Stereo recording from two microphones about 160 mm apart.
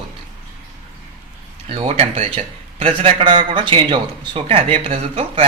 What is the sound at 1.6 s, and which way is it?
A man's voice, 40° right (ahead or behind).